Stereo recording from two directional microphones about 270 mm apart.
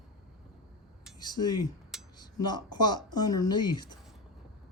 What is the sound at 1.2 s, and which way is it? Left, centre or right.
Speech, centre.